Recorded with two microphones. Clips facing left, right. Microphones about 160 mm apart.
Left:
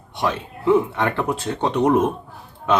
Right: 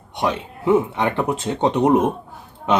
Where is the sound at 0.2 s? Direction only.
20° right (ahead or behind).